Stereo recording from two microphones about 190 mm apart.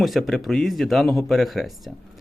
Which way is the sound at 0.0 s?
Centre (ahead or behind).